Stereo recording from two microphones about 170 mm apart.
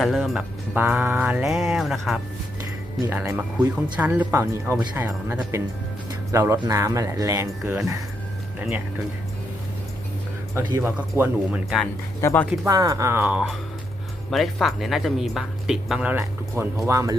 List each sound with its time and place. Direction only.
0.0 s speech: centre (ahead or behind)
3.0 s speech: 15° right (ahead or behind)
10.5 s speech: 20° right (ahead or behind)
11.2 s speech: 5° right (ahead or behind)
12.2 s speech: 10° left (ahead or behind)
12.6 s speech: 20° right (ahead or behind)